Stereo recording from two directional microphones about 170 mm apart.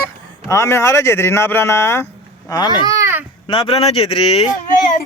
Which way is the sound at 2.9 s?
15° right (ahead or behind).